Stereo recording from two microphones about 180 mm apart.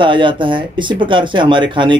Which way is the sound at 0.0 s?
25° right (ahead or behind).